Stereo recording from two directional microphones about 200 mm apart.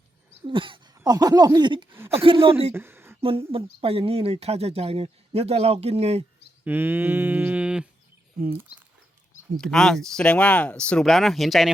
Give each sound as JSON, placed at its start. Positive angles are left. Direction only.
{"t": 0.4, "sound": "speech", "side_deg": -25}
{"t": 1.9, "sound": "a sound", "side_deg": -10}
{"t": 2.2, "sound": "speech", "side_deg": -25}
{"t": 2.7, "sound": "a sound", "side_deg": -10}
{"t": 3.2, "sound": "speech", "side_deg": -25}
{"t": 6.7, "sound": "mantra", "side_deg": -10}
{"t": 9.6, "sound": "speech", "side_deg": 0}